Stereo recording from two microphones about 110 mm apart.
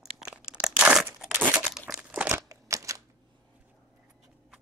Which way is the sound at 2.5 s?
30° right (ahead or behind).